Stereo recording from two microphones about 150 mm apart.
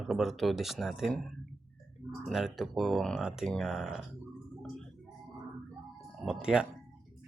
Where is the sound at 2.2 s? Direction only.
Centre (ahead or behind).